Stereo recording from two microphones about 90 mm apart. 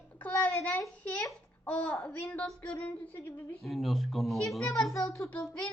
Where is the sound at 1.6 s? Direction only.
15° left (ahead or behind).